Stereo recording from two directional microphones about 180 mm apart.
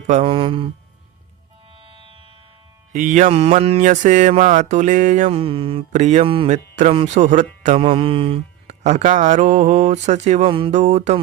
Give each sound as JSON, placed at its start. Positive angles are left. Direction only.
{"t": 0.1, "sound": "speech", "side_deg": -30}
{"t": 2.9, "sound": "mantra", "side_deg": -45}
{"t": 5.9, "sound": "speech", "side_deg": -40}
{"t": 7.8, "sound": "speech", "side_deg": -30}